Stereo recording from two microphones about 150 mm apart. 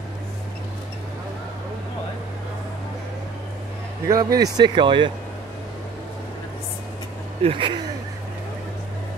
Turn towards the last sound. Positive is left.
turn(degrees=-35)  # may be behind; listen again after turning